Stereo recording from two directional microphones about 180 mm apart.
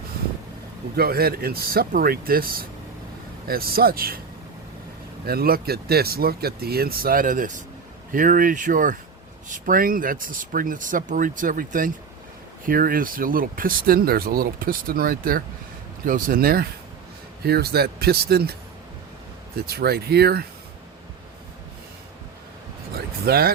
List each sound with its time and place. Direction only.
0.9 s speech: 60° right (ahead or behind)
5.2 s speech: 60° right (ahead or behind)
19.5 s speech: 60° right (ahead or behind)
23.0 s vehicle: 60° right (ahead or behind)